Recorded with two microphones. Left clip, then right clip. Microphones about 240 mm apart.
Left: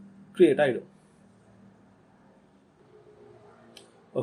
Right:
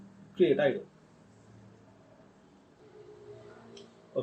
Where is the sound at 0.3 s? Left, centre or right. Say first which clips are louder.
Left 5 dB; left.